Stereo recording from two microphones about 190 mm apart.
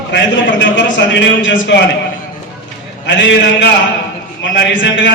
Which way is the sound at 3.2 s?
70° left (ahead or behind).